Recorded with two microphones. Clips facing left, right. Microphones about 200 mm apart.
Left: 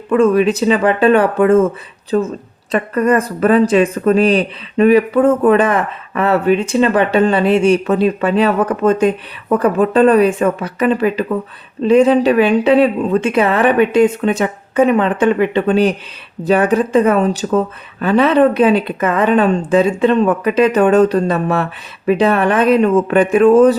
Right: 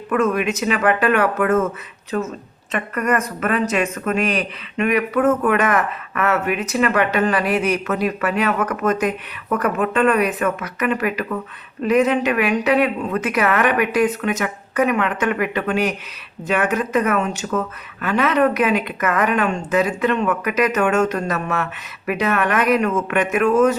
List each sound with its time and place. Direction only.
0.1 s speech: 30° left (ahead or behind)